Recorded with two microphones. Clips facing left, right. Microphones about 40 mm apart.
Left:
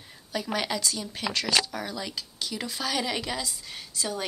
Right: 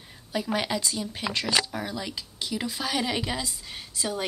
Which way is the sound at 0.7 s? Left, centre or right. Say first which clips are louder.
Right 1 dB; centre.